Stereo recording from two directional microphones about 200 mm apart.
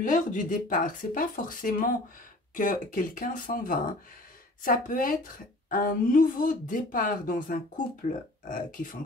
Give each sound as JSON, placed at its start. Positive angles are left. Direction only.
{"t": 0.0, "sound": "a woman's voice", "side_deg": 40}